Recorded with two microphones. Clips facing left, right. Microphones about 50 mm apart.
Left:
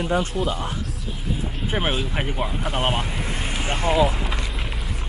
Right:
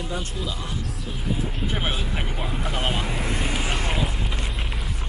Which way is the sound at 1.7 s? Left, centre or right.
Left.